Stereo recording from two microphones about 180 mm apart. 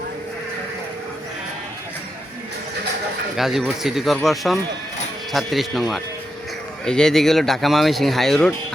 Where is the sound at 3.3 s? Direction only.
Centre (ahead or behind).